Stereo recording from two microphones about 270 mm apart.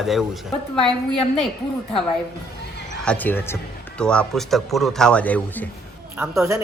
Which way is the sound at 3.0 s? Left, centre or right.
Centre.